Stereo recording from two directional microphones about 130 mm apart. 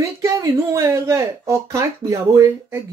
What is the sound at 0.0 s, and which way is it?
Speech, 25° right (ahead or behind).